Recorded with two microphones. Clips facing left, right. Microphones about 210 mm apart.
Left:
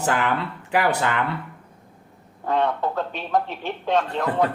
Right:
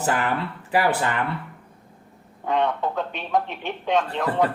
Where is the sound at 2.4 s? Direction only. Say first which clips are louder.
Left 1 dB; centre (ahead or behind).